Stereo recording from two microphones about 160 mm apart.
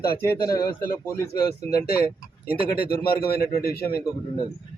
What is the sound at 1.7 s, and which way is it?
A man's voice, 75° left (ahead or behind).